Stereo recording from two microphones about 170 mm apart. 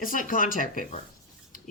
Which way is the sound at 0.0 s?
55° left (ahead or behind).